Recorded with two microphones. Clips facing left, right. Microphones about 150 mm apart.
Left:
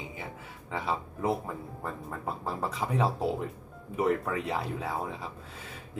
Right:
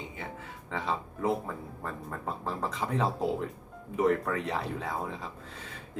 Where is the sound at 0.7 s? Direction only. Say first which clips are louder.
Left 1 dB; 10° left (ahead or behind).